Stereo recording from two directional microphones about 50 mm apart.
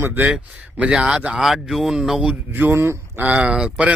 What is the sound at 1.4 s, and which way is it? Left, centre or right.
Speech, centre.